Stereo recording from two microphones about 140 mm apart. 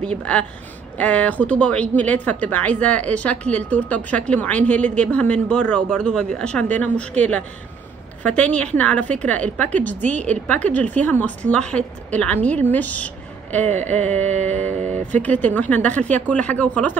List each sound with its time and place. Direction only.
0.2 s a woman's voice: 10° left (ahead or behind)
13.7 s speech: 55° right (ahead or behind)
13.9 s a woman's voice: 10° left (ahead or behind)
14.7 s speech: 60° right (ahead or behind)
15.4 s a woman's voice: 10° left (ahead or behind)